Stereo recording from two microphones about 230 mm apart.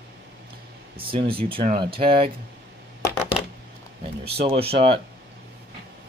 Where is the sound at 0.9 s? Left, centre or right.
Right.